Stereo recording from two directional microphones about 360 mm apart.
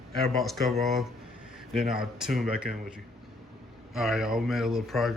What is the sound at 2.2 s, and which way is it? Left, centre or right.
Speech, centre.